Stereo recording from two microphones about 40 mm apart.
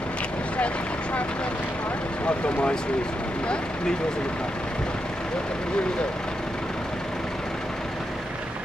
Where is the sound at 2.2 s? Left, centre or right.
Left.